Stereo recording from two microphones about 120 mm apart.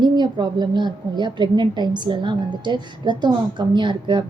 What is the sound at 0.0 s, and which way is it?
A woman's voice, 40° right (ahead or behind).